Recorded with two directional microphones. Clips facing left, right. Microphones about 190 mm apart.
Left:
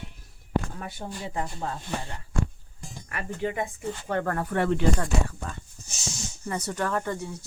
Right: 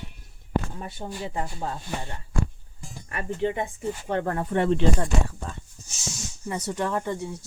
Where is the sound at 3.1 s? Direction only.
25° right (ahead or behind).